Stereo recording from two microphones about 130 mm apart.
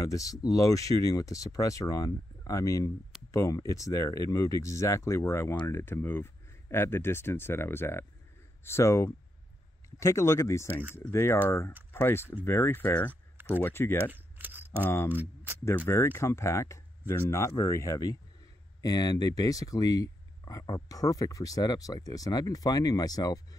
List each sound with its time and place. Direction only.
0.0 s speech: 25° left (ahead or behind)
14.1 s a sound: 15° right (ahead or behind)
14.8 s speech: 20° left (ahead or behind)
15.0 s speech: 15° right (ahead or behind)
15.9 s speech: 20° left (ahead or behind)